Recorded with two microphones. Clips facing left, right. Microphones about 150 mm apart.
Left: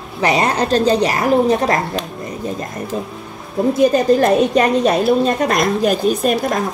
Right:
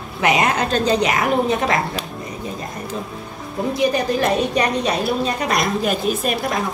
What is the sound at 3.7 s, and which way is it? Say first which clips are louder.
Speech: left 5 dB; 45° left (ahead or behind).